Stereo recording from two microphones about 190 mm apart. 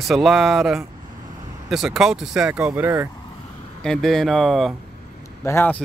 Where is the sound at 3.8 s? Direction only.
Centre (ahead or behind).